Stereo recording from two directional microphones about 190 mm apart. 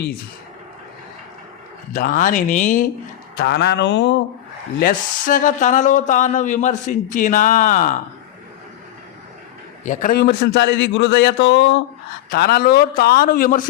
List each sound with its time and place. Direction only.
1.9 s speech: 45° left (ahead or behind)
3.3 s a man's voice: 60° left (ahead or behind)
4.8 s speech: 45° left (ahead or behind)
9.8 s a man's voice: 40° left (ahead or behind); by 11.8 s 70° left (ahead or behind)
12.3 s speech: 55° left (ahead or behind)